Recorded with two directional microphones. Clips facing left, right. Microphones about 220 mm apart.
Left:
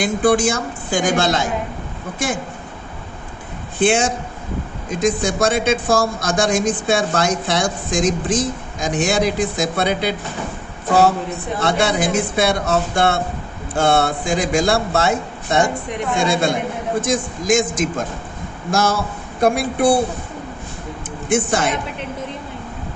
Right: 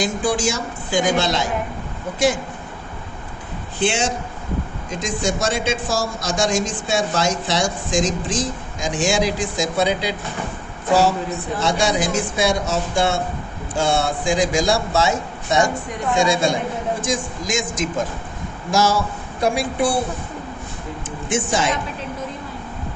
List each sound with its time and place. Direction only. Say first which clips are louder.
0.0 s speech: left 5 dB; 55° left (ahead or behind)
3.8 s a man's voice: left 4 dB; 55° left (ahead or behind)
11.6 s a man's voice: left 2 dB; 60° left (ahead or behind)
21.2 s speech: left 3 dB; 55° left (ahead or behind)